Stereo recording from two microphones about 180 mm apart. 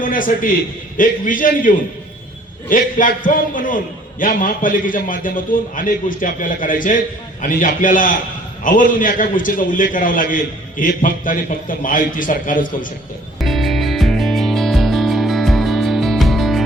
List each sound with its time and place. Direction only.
0.0 s a man's voice: 50° left (ahead or behind)
13.4 s music: centre (ahead or behind)